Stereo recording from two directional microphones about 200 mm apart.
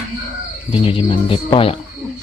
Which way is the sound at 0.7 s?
25° left (ahead or behind).